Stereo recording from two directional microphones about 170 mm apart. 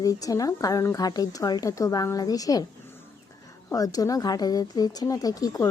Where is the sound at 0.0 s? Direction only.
20° left (ahead or behind).